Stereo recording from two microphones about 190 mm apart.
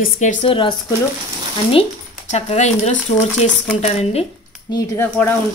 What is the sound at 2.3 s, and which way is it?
Frying, 35° left (ahead or behind).